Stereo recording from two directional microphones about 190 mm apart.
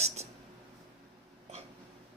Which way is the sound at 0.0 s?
35° right (ahead or behind).